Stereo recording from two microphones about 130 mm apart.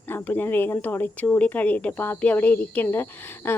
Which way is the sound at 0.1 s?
15° left (ahead or behind).